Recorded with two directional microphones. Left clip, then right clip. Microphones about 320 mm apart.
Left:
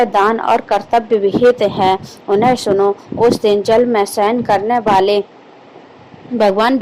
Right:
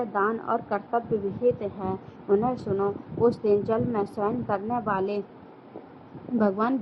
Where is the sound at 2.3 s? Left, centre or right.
Centre.